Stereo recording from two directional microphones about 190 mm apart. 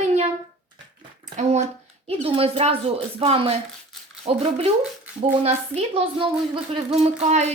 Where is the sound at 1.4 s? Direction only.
35° right (ahead or behind).